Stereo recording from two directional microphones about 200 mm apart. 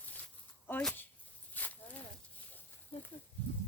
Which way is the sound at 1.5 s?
10° left (ahead or behind).